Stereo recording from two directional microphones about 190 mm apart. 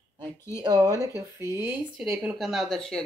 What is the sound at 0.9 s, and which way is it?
Speech, 15° left (ahead or behind).